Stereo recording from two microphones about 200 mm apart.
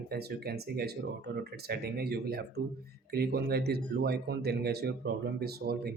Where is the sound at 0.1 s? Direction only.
55° right (ahead or behind).